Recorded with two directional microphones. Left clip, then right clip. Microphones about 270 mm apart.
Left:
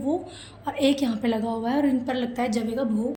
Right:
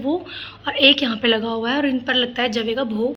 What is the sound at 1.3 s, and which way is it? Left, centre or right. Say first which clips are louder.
Speech: right 7 dB; centre.